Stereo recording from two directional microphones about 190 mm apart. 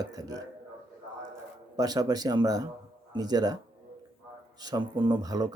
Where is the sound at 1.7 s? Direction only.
20° right (ahead or behind).